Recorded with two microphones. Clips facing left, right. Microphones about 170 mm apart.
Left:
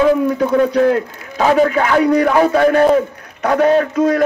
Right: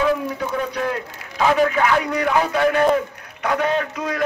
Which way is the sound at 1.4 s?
40° left (ahead or behind).